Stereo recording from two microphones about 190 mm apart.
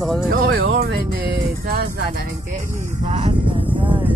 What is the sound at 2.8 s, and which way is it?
Vehicle, 35° right (ahead or behind).